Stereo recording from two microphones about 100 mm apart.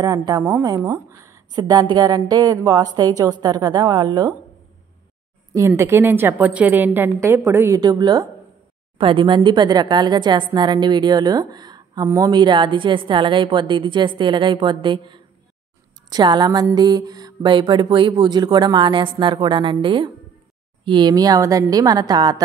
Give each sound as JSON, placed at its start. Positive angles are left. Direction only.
{"t": 0.0, "sound": "speech", "side_deg": -40}
{"t": 5.5, "sound": "a woman's voice", "side_deg": -30}
{"t": 7.8, "sound": "speech", "side_deg": -45}
{"t": 8.9, "sound": "speech", "side_deg": -60}
{"t": 21.1, "sound": "speech", "side_deg": -40}